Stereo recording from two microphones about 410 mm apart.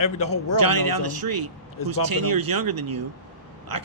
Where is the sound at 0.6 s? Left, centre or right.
Right.